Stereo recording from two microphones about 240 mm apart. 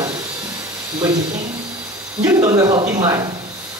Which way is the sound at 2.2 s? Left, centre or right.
Centre.